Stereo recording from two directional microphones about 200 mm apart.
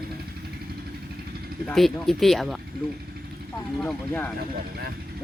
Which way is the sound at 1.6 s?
Centre (ahead or behind).